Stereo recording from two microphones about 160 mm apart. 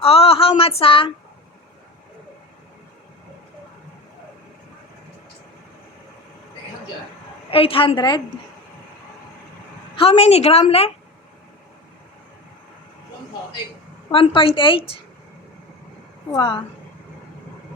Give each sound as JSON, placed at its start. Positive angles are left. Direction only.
{"t": 0.0, "sound": "a sound", "side_deg": 35}
{"t": 7.5, "sound": "a woman's voice", "side_deg": 35}
{"t": 9.9, "sound": "a woman's voice", "side_deg": 35}
{"t": 14.1, "sound": "a woman's voice", "side_deg": 35}
{"t": 16.3, "sound": "a woman's voice", "side_deg": 30}